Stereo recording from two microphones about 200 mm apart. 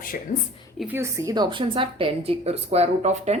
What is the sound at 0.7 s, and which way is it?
A woman's voice, 10° right (ahead or behind).